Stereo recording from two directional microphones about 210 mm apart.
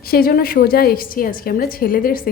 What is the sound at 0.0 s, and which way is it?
A woman's voice, 45° left (ahead or behind).